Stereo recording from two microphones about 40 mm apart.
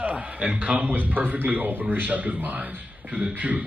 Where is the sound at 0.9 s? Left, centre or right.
Right.